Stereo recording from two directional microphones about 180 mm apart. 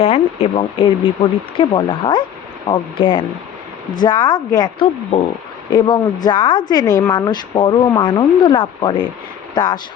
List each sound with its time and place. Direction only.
0.0 s a woman's voice: 35° left (ahead or behind)